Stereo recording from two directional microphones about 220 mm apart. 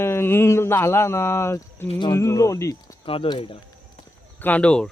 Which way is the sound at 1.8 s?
25° left (ahead or behind).